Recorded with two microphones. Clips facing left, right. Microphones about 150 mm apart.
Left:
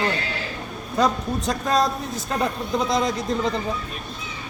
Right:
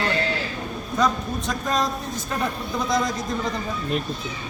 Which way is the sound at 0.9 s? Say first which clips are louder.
Left 2 dB; 35° left (ahead or behind).